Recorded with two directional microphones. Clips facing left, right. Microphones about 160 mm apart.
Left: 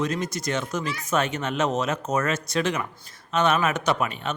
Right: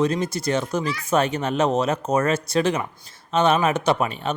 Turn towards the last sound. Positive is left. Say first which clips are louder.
# right 3 dB
turn(degrees=-30)  # may be behind; listen again after turning